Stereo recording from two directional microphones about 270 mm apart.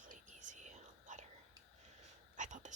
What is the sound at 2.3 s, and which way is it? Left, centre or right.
Whispering, right.